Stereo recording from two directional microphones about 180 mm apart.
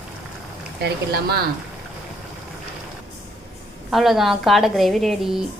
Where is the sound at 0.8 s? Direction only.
60° right (ahead or behind).